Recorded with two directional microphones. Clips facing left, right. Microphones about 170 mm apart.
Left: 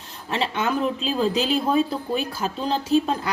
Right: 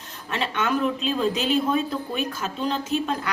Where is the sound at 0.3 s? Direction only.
30° left (ahead or behind).